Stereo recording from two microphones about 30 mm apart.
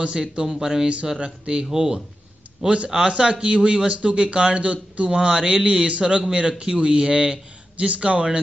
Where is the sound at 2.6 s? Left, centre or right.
Right.